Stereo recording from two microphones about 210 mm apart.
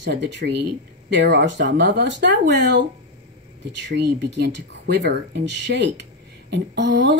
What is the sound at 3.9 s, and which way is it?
A woman's voice, 55° right (ahead or behind).